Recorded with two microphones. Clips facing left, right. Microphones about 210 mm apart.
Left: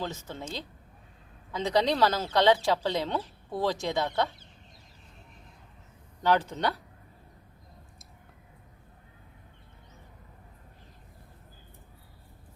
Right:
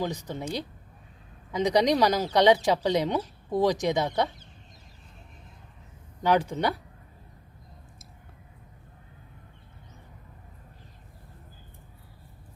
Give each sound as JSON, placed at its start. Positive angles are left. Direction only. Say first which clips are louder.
{"t": 0.0, "sound": "speech", "louder": "right 5 dB", "side_deg": -15}
{"t": 6.2, "sound": "speech", "louder": "right 2 dB", "side_deg": -10}